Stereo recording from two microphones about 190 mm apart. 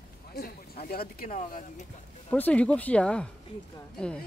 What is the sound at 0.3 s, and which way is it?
Speech, 55° left (ahead or behind).